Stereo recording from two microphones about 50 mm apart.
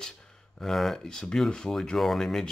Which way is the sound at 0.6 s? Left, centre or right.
Centre.